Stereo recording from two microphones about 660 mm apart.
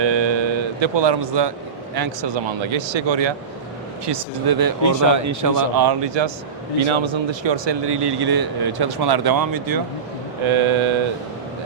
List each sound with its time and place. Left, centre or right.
0.0 s music: right
2.0 s speech: right
10.4 s speech: right